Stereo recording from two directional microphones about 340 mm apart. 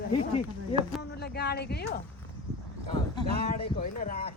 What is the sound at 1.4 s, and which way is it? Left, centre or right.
Speech, left.